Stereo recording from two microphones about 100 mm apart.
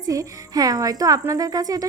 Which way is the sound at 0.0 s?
35° right (ahead or behind).